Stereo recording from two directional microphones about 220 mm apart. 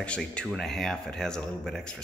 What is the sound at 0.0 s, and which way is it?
Speech, 5° left (ahead or behind).